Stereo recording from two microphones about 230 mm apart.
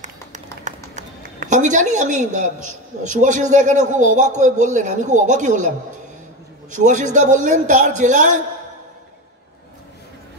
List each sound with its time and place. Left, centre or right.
0.0 s run: right
0.9 s a man's voice: right
6.7 s a man's voice: right